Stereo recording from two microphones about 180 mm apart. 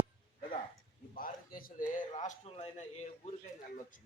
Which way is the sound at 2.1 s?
40° left (ahead or behind).